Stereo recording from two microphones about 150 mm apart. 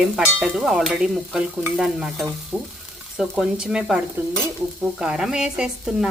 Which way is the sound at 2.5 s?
10° right (ahead or behind).